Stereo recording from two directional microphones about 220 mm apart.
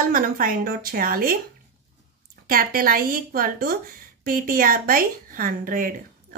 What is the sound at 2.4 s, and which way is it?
A woman's voice, 40° right (ahead or behind).